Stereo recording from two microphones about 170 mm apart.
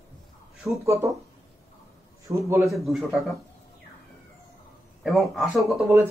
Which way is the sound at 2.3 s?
15° right (ahead or behind).